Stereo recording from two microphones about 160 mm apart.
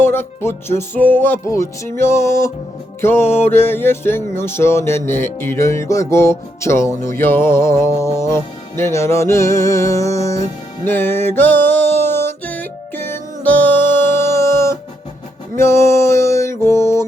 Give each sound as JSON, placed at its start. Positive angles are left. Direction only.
{"t": 0.0, "sound": "music", "side_deg": 15}